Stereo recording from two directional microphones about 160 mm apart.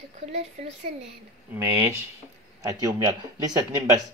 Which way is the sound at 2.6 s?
20° right (ahead or behind).